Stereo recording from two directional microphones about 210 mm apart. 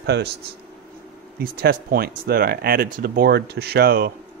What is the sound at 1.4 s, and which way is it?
Speech, 45° right (ahead or behind).